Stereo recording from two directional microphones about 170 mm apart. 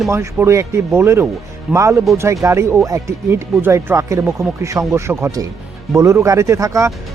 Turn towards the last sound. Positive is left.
turn(degrees=-20)  # may be behind; listen again after turning